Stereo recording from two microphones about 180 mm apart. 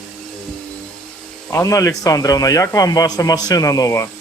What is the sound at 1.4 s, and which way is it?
Speech, 15° left (ahead or behind).